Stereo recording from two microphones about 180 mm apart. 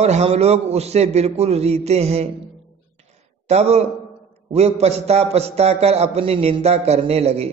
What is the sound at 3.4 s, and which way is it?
A man's voice, 35° right (ahead or behind).